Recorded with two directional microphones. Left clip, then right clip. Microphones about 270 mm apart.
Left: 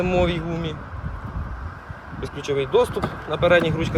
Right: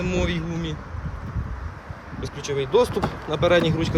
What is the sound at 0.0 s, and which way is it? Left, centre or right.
Speech, centre.